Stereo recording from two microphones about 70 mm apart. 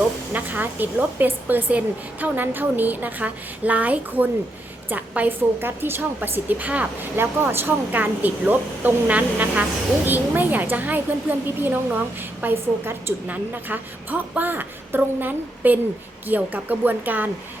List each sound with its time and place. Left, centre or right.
0.3 s a woman's voice: right